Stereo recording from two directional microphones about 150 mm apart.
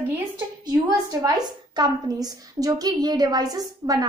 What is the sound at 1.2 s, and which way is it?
A child's voice, 25° right (ahead or behind).